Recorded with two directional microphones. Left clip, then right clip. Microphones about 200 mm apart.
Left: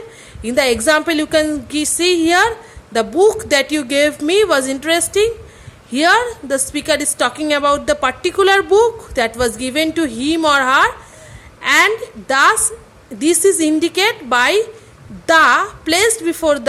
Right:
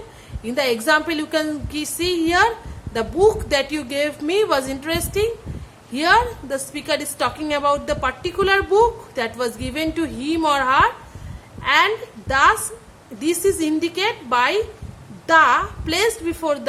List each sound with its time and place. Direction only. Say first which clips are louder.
0.4 s a woman's voice: left 5 dB; 20° left (ahead or behind)